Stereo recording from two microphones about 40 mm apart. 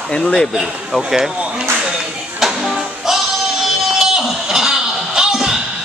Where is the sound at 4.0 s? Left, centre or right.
Centre.